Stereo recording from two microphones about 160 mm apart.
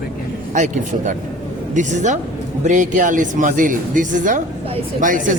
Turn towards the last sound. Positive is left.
turn(degrees=-55)  # may be behind; listen again after turning